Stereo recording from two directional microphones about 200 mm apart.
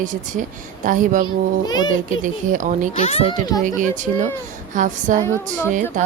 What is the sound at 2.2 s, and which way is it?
Speech, 40° right (ahead or behind).